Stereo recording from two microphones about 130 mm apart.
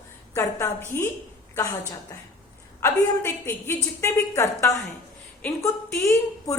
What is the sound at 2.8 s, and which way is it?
A woman's voice, 20° left (ahead or behind).